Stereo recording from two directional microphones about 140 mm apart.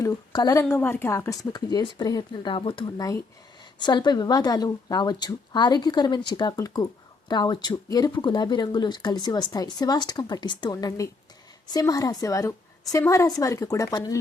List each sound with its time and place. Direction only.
0.0 s a woman's voice: 25° left (ahead or behind)